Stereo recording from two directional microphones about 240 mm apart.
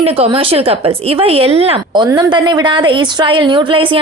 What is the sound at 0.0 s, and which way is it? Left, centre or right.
Speech, right.